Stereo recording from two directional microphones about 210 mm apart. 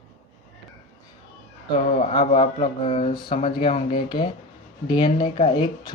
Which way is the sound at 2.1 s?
25° left (ahead or behind).